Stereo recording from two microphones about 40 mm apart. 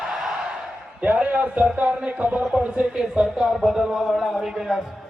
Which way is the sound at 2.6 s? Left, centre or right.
Right.